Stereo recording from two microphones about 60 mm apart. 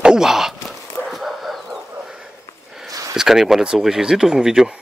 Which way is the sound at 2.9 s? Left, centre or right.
Right.